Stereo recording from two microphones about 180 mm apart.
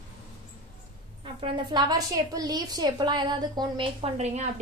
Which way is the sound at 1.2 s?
30° right (ahead or behind).